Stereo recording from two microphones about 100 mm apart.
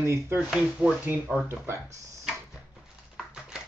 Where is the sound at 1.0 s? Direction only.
20° right (ahead or behind).